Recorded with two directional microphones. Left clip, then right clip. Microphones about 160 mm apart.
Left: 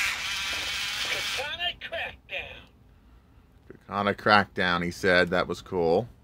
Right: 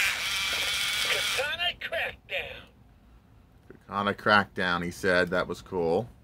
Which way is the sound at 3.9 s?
25° left (ahead or behind).